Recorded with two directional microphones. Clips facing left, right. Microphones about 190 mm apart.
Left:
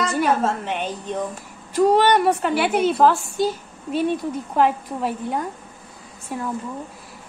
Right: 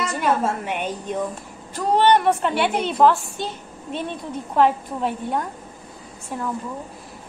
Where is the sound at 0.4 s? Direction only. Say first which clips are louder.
Left 1 dB; 10° right (ahead or behind).